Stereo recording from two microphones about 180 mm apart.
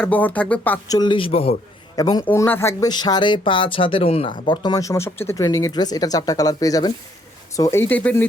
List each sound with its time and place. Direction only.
0.0 s speech: 10° left (ahead or behind)
0.9 s speech: 25° left (ahead or behind)
2.0 s speech: 20° left (ahead or behind)